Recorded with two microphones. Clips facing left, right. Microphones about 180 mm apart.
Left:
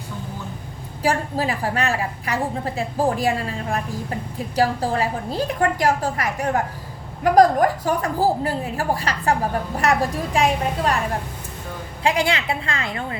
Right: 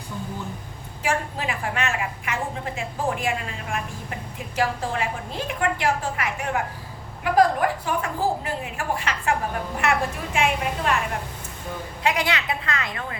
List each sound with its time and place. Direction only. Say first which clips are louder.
1.0 s a woman's voice: left 5 dB; 35° left (ahead or behind)
12.0 s a woman's voice: left 4 dB; 30° left (ahead or behind)